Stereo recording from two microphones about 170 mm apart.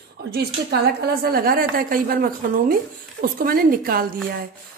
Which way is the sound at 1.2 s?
60° right (ahead or behind).